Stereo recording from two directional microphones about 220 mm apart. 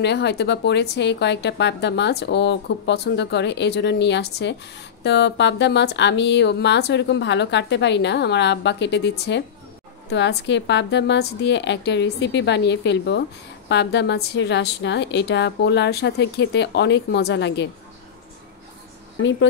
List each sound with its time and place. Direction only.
0.0 s speech: 50° left (ahead or behind)